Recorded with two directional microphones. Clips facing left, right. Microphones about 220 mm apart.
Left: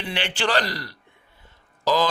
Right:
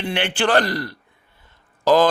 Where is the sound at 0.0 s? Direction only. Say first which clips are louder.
Right 5 dB; 55° right (ahead or behind).